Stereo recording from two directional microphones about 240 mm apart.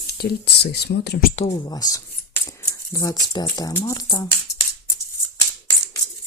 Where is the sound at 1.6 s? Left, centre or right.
Centre.